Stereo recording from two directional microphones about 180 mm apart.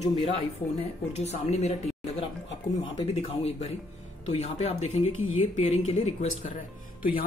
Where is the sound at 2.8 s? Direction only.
35° left (ahead or behind).